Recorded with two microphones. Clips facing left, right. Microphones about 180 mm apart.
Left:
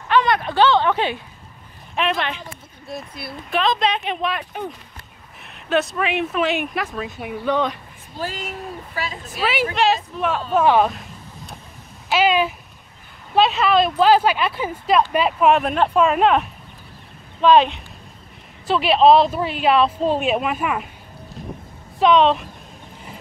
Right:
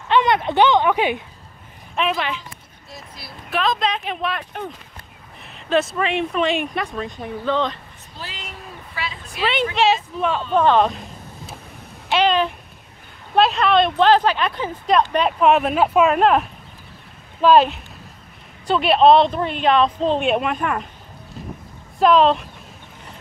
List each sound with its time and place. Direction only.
0.1 s speech: 20° right (ahead or behind); by 2.3 s 5° right (ahead or behind)
2.9 s speech: 60° left (ahead or behind)
3.4 s speech: centre (ahead or behind)
8.2 s a woman's voice: 45° left (ahead or behind)
9.4 s speech: 5° left (ahead or behind)
12.1 s a sound: 5° left (ahead or behind)
13.3 s speech: centre (ahead or behind)
21.9 s speech: centre (ahead or behind)